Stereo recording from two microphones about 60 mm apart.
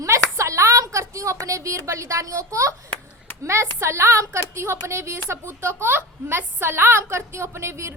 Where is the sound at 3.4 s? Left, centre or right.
Right.